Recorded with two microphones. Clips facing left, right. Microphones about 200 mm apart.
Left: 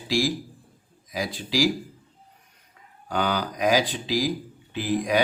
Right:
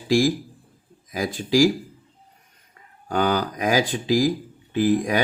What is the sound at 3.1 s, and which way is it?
Speech, 45° right (ahead or behind).